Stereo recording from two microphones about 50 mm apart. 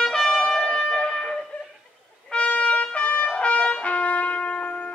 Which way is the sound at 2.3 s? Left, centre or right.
Left.